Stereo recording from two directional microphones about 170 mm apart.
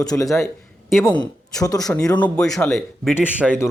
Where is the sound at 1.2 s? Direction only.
20° left (ahead or behind).